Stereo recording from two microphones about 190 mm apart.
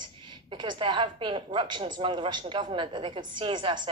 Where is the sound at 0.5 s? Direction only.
25° right (ahead or behind).